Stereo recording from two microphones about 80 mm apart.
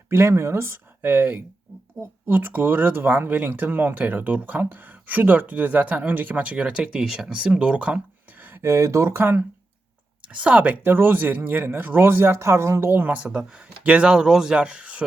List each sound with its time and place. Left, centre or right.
0.1 s speech: right
10.3 s speech: centre; by 12.9 s right
12.9 s speech: right